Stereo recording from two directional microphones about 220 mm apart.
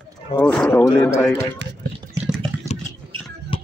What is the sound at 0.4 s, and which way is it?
A man's voice, 5° left (ahead or behind).